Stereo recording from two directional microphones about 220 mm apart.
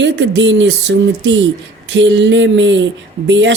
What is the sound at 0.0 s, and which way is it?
Speech, 55° right (ahead or behind).